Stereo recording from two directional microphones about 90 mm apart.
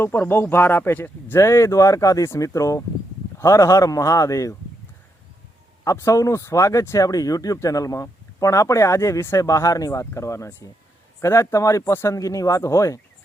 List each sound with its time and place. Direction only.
0.0 s speech: 25° left (ahead or behind)
1.4 s speech: 35° left (ahead or behind)
5.8 s speech: 35° left (ahead or behind)